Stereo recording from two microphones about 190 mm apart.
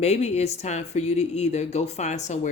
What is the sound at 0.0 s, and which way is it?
Speech, 35° left (ahead or behind).